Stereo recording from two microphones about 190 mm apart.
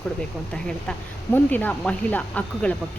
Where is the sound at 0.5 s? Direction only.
5° left (ahead or behind).